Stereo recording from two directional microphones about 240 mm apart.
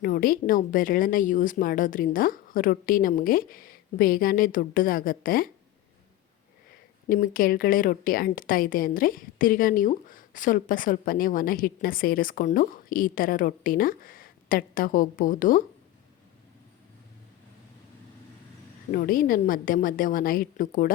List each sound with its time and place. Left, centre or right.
0.0 s a woman's voice: left
7.1 s a woman's voice: left
18.9 s a woman's voice: left